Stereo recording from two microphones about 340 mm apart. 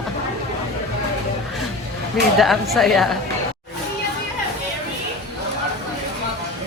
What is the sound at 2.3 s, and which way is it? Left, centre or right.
Speech, centre.